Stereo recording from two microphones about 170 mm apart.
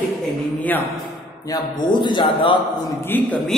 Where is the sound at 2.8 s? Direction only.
10° left (ahead or behind).